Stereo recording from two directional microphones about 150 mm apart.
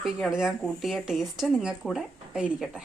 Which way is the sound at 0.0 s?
Centre (ahead or behind).